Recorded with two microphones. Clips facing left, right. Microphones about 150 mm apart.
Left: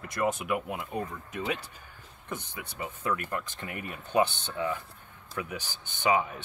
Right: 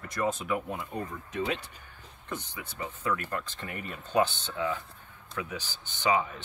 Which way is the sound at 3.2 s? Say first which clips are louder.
Even; 10° left (ahead or behind).